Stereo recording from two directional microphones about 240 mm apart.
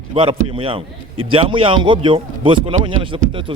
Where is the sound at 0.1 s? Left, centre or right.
Right.